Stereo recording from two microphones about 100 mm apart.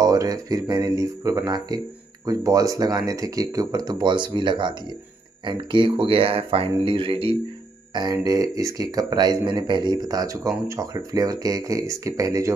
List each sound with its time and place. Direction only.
0.0 s speech: 40° right (ahead or behind); by 7.3 s 60° right (ahead or behind)
7.9 s speech: 40° right (ahead or behind)